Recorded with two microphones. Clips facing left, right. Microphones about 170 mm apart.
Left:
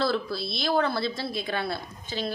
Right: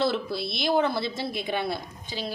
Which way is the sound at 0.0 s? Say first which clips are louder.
Right 1 dB; 20° right (ahead or behind).